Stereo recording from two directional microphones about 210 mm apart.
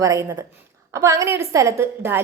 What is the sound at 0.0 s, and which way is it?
A woman's voice, 15° right (ahead or behind).